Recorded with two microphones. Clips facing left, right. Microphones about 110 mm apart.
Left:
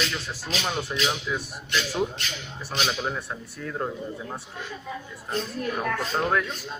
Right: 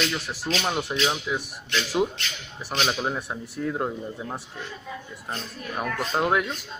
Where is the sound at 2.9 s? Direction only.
15° right (ahead or behind).